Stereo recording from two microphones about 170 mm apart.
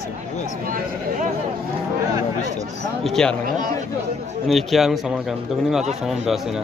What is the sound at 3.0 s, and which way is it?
Speech, 5° left (ahead or behind).